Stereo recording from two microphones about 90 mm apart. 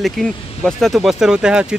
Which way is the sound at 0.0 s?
Centre (ahead or behind).